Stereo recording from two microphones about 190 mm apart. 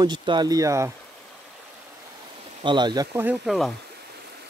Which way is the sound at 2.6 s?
25° right (ahead or behind).